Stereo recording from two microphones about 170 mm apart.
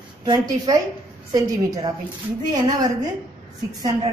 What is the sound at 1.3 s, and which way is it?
Speech, 20° right (ahead or behind).